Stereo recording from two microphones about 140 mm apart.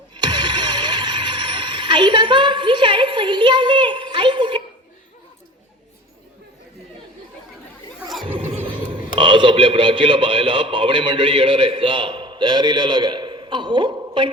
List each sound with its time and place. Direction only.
0.1 s music: 30° right (ahead or behind)
9.1 s a man's voice: 35° right (ahead or behind)